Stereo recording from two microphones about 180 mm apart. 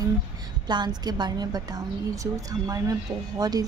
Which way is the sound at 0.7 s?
25° right (ahead or behind).